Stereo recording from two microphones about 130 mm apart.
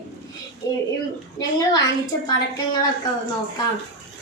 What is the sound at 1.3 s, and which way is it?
Speech, 30° left (ahead or behind).